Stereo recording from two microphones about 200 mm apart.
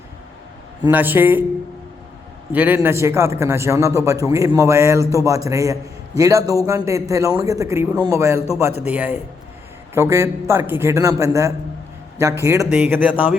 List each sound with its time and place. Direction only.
0.9 s a man's voice: 10° right (ahead or behind)
2.5 s a man's voice: 10° right (ahead or behind)